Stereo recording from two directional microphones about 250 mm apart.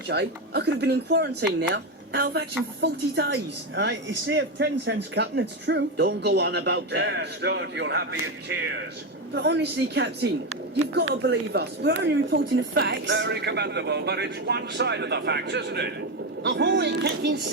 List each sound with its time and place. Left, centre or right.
0.1 s speech: right
9.3 s speech: right